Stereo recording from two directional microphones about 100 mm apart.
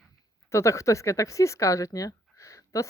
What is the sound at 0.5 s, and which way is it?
Speech, 30° left (ahead or behind).